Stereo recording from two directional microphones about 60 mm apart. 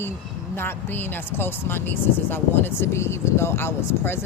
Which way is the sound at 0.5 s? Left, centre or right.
Left.